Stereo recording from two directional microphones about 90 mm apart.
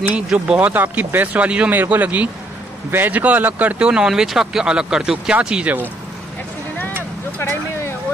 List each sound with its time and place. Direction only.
0.1 s speech: 10° right (ahead or behind)
7.3 s vehicle: 25° left (ahead or behind)